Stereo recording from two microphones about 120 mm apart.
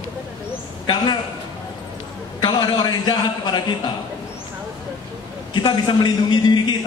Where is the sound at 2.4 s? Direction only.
35° left (ahead or behind).